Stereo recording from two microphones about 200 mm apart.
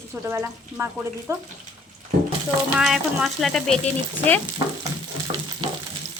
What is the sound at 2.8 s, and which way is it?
Speech, centre (ahead or behind).